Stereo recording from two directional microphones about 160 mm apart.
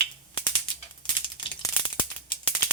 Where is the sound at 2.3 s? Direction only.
30° left (ahead or behind).